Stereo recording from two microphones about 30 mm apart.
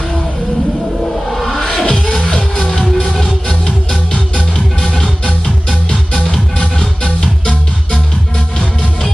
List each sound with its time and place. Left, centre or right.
1.3 s music: centre
3.2 s music: centre